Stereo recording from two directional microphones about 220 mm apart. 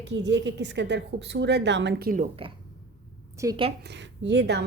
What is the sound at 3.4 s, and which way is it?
Speech, 15° right (ahead or behind).